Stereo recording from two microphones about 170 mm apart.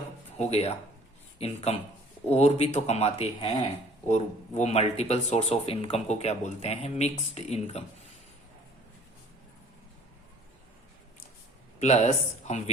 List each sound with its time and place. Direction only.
0.3 s speech: 35° left (ahead or behind)
11.8 s speech: 40° left (ahead or behind)